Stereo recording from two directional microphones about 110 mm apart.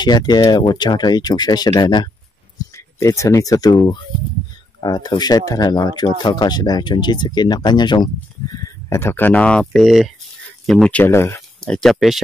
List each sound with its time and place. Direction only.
0.0 s speech: 40° left (ahead or behind)
3.0 s speech: 25° left (ahead or behind)
8.8 s speech: 25° left (ahead or behind)
11.1 s speech: 25° left (ahead or behind)
11.6 s speech: 5° left (ahead or behind)